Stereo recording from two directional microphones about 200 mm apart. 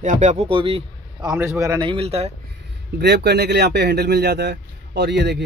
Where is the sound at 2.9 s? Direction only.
55° right (ahead or behind).